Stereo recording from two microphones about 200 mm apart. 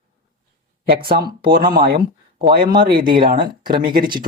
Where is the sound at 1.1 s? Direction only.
50° right (ahead or behind).